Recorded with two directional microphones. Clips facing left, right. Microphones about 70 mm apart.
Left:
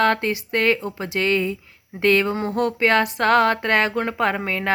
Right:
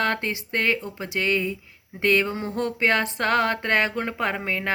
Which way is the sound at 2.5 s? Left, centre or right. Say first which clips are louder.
Left 4 dB; right.